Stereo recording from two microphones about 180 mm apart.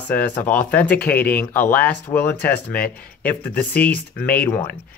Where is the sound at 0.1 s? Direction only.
10° left (ahead or behind).